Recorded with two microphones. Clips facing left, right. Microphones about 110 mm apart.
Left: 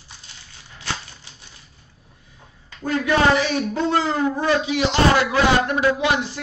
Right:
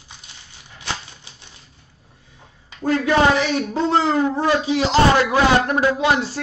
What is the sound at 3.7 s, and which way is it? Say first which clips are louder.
Speech: right 4 dB; 25° right (ahead or behind).